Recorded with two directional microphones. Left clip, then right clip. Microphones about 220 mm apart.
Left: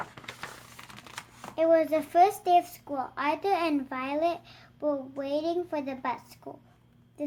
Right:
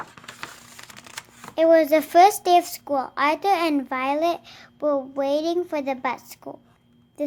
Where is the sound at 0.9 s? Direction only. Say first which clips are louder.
Right 4 dB; 25° right (ahead or behind).